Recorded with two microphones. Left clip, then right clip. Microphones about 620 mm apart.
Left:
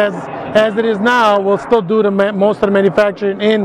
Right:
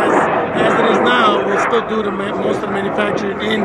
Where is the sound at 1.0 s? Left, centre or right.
Left.